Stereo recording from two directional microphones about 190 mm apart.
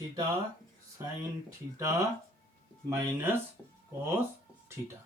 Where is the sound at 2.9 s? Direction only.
10° right (ahead or behind).